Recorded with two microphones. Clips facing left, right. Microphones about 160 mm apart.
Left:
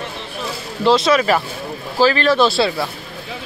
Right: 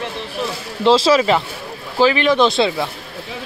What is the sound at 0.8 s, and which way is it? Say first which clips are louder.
Speech: right 1 dB; 30° right (ahead or behind).